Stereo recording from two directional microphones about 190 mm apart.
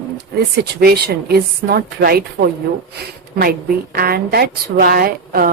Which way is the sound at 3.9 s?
55° right (ahead or behind).